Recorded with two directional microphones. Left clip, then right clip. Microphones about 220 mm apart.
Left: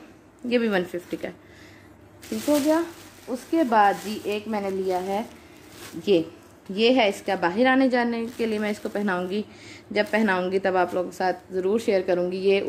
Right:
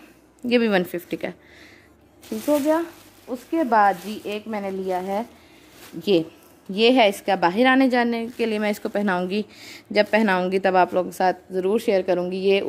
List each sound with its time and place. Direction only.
0.5 s a woman's voice: 45° right (ahead or behind)
3.3 s speech: 30° right (ahead or behind)
6.7 s a woman's voice: 45° right (ahead or behind)